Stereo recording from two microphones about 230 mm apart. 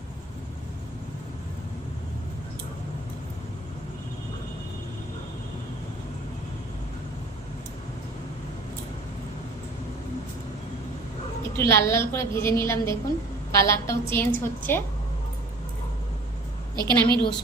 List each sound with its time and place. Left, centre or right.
11.5 s a woman's voice: centre
16.7 s a woman's voice: centre